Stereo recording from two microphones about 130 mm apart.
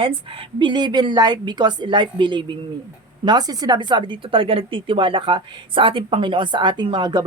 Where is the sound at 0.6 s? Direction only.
35° right (ahead or behind).